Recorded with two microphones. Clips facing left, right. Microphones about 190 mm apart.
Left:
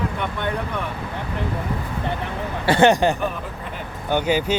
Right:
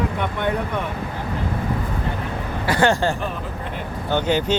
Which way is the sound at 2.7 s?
20° left (ahead or behind).